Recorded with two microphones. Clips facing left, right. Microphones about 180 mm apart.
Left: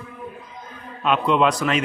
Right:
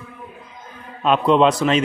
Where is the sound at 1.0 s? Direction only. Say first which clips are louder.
Right 4 dB; 35° right (ahead or behind).